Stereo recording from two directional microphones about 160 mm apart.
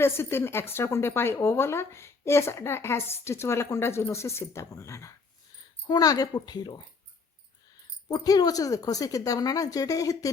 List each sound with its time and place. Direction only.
0.0 s speech: 15° left (ahead or behind)
8.1 s speech: 25° left (ahead or behind)